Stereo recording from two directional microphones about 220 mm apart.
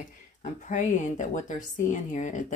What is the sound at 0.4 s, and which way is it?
Speech, 35° left (ahead or behind).